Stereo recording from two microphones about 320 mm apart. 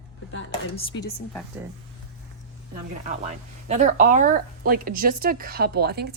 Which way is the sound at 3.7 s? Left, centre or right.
Right.